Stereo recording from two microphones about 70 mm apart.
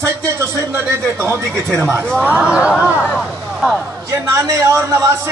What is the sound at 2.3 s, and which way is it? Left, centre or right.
Speech, centre.